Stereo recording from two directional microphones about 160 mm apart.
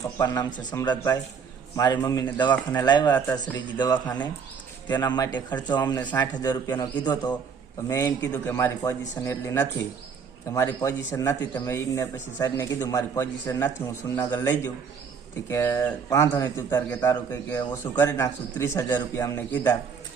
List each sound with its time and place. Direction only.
0.2 s a man's voice: 25° left (ahead or behind)